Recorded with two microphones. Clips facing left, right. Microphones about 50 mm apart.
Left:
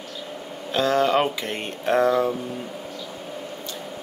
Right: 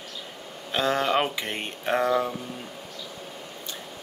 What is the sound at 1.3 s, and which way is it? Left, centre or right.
Speech, right.